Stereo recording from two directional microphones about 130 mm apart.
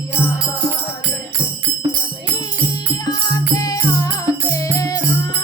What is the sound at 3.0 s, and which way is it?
Music, 30° left (ahead or behind).